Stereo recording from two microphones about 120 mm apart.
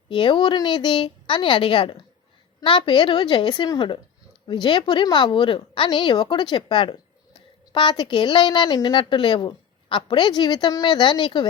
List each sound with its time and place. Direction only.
0.1 s a woman's voice: 45° left (ahead or behind)